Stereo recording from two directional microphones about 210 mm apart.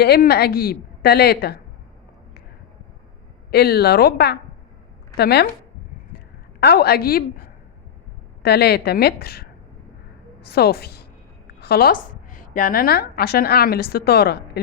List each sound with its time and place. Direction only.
0.0 s a woman's voice: 50° left (ahead or behind)
3.5 s a woman's voice: 50° left (ahead or behind)
6.6 s a woman's voice: 50° left (ahead or behind)